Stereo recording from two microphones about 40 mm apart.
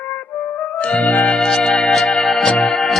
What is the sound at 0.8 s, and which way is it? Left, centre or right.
Music, left.